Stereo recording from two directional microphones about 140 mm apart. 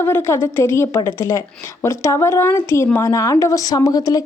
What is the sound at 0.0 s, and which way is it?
A woman's voice, 15° left (ahead or behind).